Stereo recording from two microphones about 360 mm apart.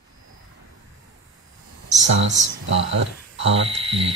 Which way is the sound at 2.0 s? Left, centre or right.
Right.